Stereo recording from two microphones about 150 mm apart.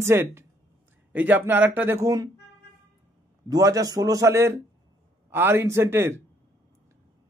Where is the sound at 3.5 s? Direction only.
20° right (ahead or behind).